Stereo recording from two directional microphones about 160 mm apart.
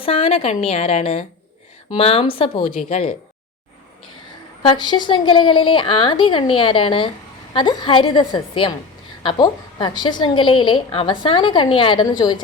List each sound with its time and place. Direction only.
0.0 s a woman's voice: 35° left (ahead or behind)
4.6 s a woman's voice: 30° left (ahead or behind)